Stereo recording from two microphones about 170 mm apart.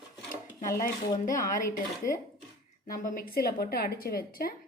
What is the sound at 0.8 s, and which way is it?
Speech, 50° left (ahead or behind).